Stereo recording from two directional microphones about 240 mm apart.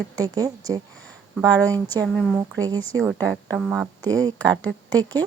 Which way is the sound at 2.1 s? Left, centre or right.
Centre.